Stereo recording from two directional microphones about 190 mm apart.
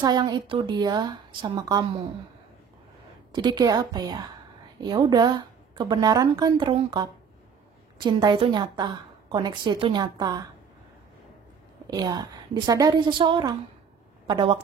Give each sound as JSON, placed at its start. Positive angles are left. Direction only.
{"t": 0.0, "sound": "a woman's voice", "side_deg": -20}
{"t": 3.3, "sound": "a woman's voice", "side_deg": -25}
{"t": 11.9, "sound": "a woman's voice", "side_deg": -20}